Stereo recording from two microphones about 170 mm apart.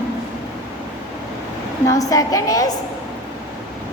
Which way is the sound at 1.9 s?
20° left (ahead or behind).